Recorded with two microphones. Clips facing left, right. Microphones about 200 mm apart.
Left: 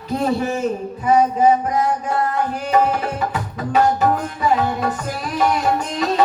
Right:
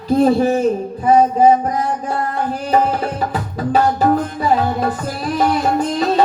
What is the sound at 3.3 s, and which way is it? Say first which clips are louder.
Tabla: right 4 dB; 35° right (ahead or behind).